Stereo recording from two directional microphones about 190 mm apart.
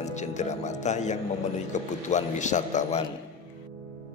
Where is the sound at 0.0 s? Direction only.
40° left (ahead or behind).